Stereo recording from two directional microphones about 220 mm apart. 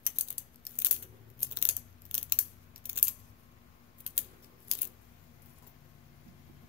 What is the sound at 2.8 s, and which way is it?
Coin, 10° right (ahead or behind).